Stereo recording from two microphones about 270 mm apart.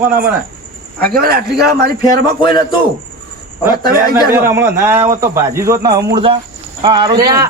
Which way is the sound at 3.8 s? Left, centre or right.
Right.